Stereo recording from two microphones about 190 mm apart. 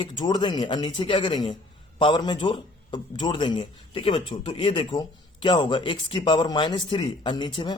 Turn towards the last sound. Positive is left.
turn(degrees=25)  # may be behind; listen again after turning